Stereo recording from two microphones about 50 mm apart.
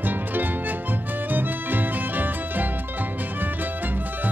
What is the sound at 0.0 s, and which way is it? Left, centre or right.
Music, right.